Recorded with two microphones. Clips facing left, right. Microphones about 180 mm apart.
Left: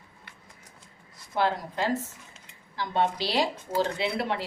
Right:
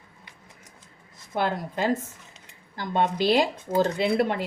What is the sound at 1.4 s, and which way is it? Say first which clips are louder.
A woman's voice: right 1 dB; 55° right (ahead or behind).